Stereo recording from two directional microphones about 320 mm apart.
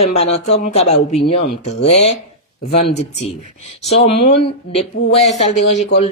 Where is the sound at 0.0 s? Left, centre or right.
Centre.